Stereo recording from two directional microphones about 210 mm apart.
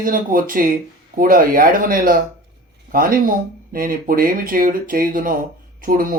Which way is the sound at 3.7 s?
45° right (ahead or behind).